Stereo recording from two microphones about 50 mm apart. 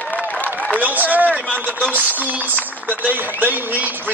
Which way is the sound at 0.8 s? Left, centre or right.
Right.